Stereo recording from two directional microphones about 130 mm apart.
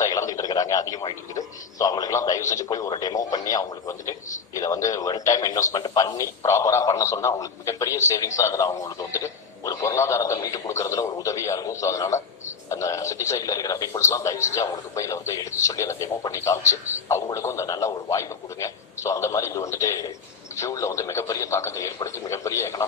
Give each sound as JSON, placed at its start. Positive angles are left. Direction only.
{"t": 0.0, "sound": "speech", "side_deg": 25}